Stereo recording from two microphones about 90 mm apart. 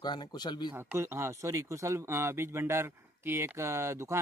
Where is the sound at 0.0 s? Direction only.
55° left (ahead or behind).